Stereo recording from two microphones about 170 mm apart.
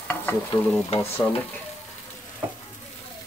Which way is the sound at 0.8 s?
35° left (ahead or behind).